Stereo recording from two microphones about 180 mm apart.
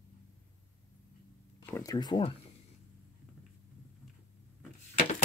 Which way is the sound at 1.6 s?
20° left (ahead or behind).